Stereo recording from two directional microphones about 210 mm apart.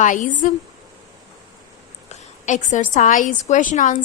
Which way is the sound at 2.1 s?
35° left (ahead or behind).